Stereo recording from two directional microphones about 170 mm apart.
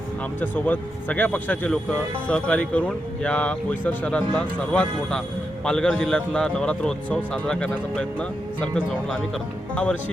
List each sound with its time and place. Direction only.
0.3 s a man's voice: 10° left (ahead or behind)